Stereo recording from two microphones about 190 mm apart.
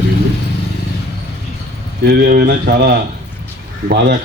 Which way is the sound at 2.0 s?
55° right (ahead or behind).